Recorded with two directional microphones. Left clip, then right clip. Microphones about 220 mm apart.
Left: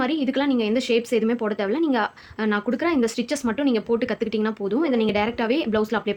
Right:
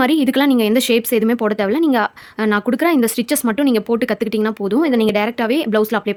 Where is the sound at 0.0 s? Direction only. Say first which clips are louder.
Right 8 dB; 40° right (ahead or behind).